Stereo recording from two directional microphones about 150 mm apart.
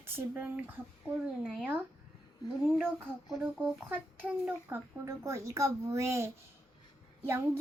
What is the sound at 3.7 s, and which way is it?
A child's voice, 10° right (ahead or behind).